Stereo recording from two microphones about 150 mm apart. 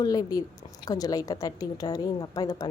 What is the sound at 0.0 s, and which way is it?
A woman's voice, 25° left (ahead or behind).